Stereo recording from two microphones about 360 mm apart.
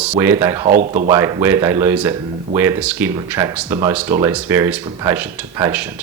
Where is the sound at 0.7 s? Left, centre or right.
Right.